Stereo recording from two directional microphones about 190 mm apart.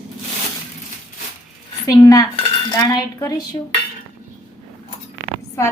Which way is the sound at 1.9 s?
20° left (ahead or behind).